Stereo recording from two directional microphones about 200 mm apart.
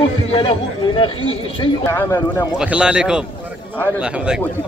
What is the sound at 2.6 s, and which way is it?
A man's voice, 5° right (ahead or behind).